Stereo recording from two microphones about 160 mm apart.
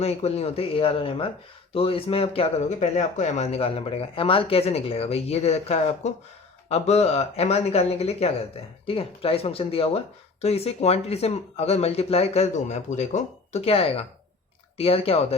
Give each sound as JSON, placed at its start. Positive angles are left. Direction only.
{"t": 0.0, "sound": "speech", "side_deg": 40}